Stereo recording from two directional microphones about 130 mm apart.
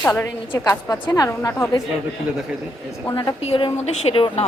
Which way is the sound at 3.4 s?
45° left (ahead or behind).